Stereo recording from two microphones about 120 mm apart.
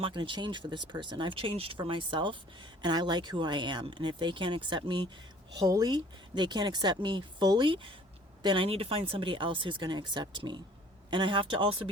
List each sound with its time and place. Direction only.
0.0 s speech: 40° right (ahead or behind)